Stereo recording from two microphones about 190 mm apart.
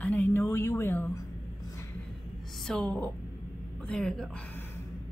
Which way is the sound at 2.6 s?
5° left (ahead or behind).